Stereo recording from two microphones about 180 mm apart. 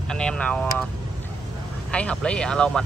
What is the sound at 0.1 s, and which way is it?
Speech, 5° left (ahead or behind).